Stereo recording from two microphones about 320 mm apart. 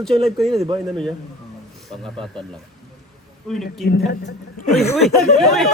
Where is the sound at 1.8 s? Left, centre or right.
Centre.